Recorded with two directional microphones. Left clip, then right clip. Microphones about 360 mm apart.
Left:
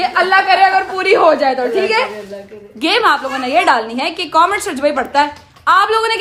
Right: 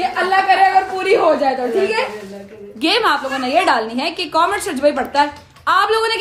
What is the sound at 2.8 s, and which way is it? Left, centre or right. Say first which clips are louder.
A woman's voice: left 3 dB; centre.